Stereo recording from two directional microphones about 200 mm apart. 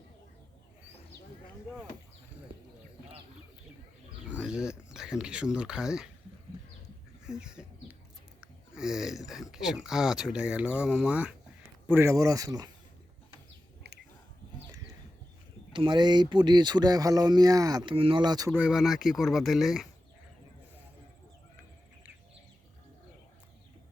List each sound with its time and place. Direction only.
4.3 s bird: 5° right (ahead or behind)
4.9 s speech: 5° right (ahead or behind)
7.3 s chicken: 5° right (ahead or behind)
8.7 s speech: 5° right (ahead or behind); by 12.7 s 20° right (ahead or behind)
15.7 s speech: 25° right (ahead or behind); by 19.9 s centre (ahead or behind)